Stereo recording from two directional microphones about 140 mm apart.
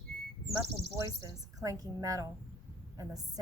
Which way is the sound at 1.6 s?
25° right (ahead or behind).